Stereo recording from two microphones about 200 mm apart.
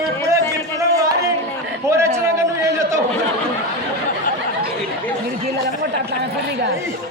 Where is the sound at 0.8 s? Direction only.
15° right (ahead or behind).